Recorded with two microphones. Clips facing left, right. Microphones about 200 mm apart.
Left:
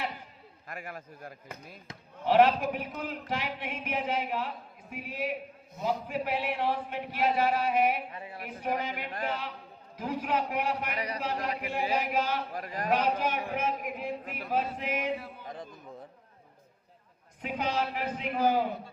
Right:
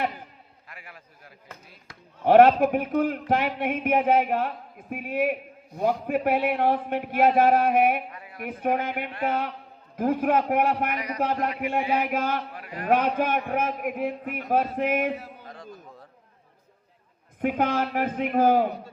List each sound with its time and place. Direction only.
0.7 s a man's voice: 45° left (ahead or behind)
2.2 s a man's voice: 55° right (ahead or behind)
8.1 s a sound: 25° left (ahead or behind)
8.4 s a man's voice: 55° right (ahead or behind)
10.9 s a man's voice: 30° left (ahead or behind)
11.9 s speech: 55° right (ahead or behind)
12.5 s a man's voice: 40° left (ahead or behind)
12.9 s a man's voice: 55° right (ahead or behind)
15.4 s a sound: 20° left (ahead or behind)
17.4 s a man's voice: 55° right (ahead or behind)